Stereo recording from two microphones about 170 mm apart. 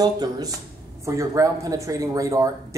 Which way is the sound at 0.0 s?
25° right (ahead or behind).